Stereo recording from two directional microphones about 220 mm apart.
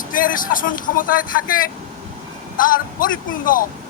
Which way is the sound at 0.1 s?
40° left (ahead or behind).